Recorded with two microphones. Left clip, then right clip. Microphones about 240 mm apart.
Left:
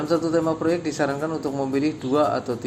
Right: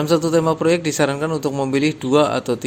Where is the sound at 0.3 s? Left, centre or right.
Right.